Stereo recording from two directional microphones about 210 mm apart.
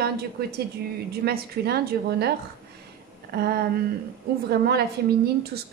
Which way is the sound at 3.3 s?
45° right (ahead or behind).